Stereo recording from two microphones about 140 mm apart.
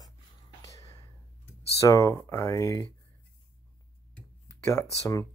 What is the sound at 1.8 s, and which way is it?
Speech, 25° left (ahead or behind).